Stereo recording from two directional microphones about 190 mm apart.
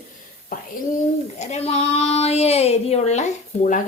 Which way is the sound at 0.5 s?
40° left (ahead or behind).